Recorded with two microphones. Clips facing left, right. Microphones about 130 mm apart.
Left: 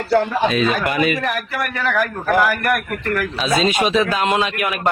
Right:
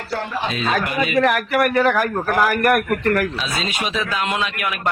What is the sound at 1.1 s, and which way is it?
Speech, 65° right (ahead or behind).